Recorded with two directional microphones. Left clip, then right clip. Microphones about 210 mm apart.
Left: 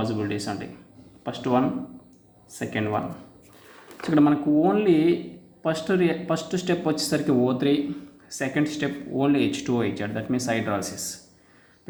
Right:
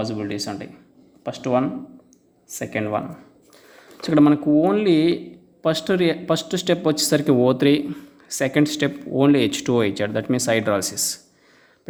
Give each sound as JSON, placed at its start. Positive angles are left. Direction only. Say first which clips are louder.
{"t": 0.0, "sound": "speech", "louder": "right 1 dB", "side_deg": -25}
{"t": 4.0, "sound": "speech", "louder": "right 4 dB", "side_deg": -30}